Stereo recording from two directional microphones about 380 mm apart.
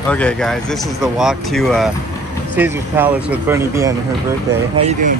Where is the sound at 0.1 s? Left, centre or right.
Centre.